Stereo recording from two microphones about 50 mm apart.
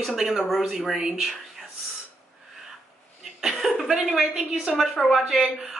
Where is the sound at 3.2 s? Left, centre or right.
Centre.